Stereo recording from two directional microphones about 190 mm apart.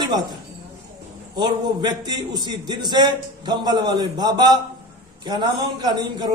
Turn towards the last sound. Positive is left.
turn(degrees=-20)  # may be behind; listen again after turning